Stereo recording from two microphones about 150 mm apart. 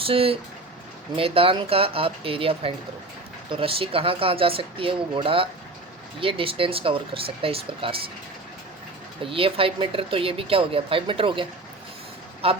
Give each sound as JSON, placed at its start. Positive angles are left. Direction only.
{"t": 0.0, "sound": "speech", "side_deg": -40}
{"t": 9.2, "sound": "speech", "side_deg": -35}